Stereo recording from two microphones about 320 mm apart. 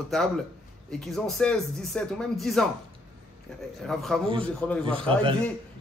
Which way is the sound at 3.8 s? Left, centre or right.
Centre.